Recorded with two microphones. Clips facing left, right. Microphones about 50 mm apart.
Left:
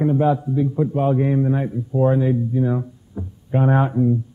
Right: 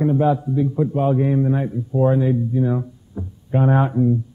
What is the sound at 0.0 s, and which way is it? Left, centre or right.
A man's voice, centre.